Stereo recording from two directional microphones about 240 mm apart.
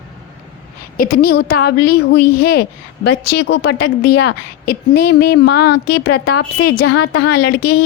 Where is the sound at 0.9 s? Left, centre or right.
Left.